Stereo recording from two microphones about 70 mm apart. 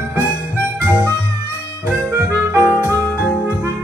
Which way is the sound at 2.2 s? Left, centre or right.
Right.